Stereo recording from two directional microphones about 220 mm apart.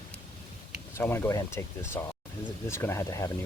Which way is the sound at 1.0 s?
10° left (ahead or behind).